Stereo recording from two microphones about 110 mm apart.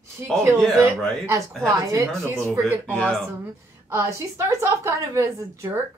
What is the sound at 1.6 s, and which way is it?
A woman's voice, 30° right (ahead or behind).